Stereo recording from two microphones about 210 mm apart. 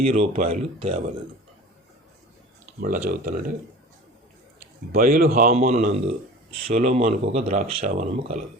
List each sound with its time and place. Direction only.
0.0 s speech: 30° right (ahead or behind)
3.1 s speech: 40° right (ahead or behind)
4.9 s speech: 40° right (ahead or behind)
5.5 s speech: 35° right (ahead or behind)